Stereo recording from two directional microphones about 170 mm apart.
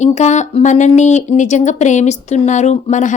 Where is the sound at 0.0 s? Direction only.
45° left (ahead or behind).